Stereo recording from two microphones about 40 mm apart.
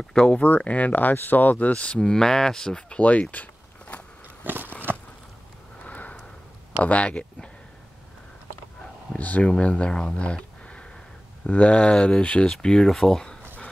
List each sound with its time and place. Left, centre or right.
0.0 s speech: centre
0.6 s speech: left
2.0 s speech: centre
3.0 s a sound: left
5.9 s a sound: left
6.8 s speech: left
9.2 s speech: left
12.4 s speech: centre